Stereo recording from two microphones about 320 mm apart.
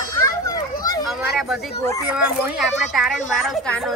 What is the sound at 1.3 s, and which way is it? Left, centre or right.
Speech, centre.